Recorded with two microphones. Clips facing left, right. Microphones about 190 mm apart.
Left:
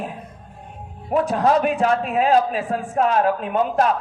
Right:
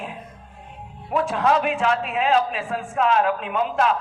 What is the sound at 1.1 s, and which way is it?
A man's voice, 40° left (ahead or behind).